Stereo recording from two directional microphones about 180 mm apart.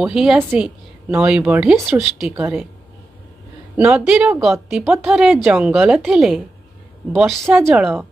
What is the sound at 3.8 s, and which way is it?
A woman's voice, 5° right (ahead or behind).